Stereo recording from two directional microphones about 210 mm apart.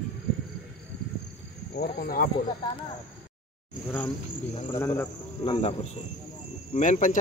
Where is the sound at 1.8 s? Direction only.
45° left (ahead or behind).